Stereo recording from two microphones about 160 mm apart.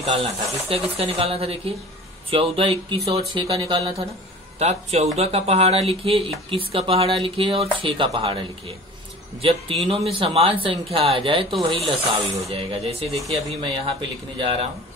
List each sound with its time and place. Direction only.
0.0 s speech: 35° right (ahead or behind)